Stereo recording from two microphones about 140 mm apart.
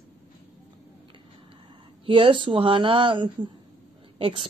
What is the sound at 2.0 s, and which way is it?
Speech, 40° right (ahead or behind).